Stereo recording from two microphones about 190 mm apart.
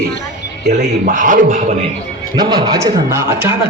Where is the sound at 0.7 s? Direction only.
40° right (ahead or behind).